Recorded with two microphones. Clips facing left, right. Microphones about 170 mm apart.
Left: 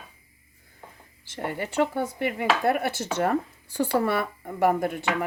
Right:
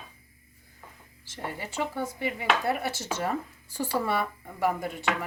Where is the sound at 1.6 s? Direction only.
60° left (ahead or behind).